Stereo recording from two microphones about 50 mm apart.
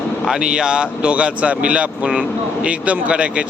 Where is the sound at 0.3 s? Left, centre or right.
Centre.